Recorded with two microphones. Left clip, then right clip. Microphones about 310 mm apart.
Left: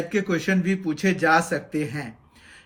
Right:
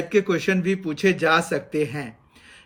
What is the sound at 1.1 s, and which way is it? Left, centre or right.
Speech, centre.